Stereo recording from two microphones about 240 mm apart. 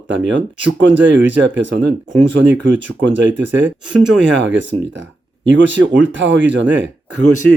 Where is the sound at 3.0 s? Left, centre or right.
Right.